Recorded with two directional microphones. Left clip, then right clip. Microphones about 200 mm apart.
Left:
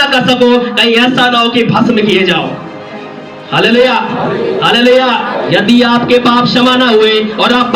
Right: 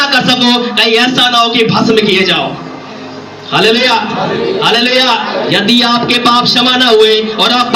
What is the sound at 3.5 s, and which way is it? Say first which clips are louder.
A man's voice: left 1 dB; 35° left (ahead or behind).